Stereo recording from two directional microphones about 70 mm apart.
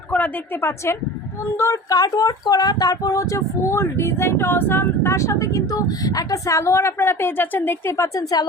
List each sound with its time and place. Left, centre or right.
0.1 s a woman's voice: left
1.5 s speech: left
1.9 s speech: left
7.9 s speech: left